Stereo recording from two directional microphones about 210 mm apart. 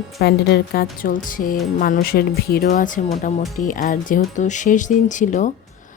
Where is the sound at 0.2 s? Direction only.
50° left (ahead or behind).